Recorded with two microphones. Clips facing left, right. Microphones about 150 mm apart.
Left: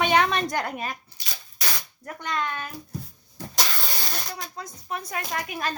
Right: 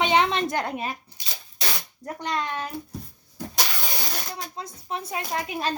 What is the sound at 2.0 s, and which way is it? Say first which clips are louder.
Speech: right 1 dB; 35° right (ahead or behind).